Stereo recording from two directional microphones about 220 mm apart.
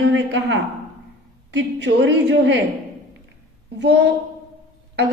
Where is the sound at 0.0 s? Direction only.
55° right (ahead or behind).